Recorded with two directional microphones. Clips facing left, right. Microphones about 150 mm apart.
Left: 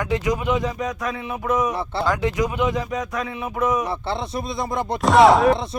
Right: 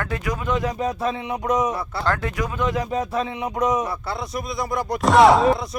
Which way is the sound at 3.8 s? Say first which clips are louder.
Left 2 dB; 25° left (ahead or behind).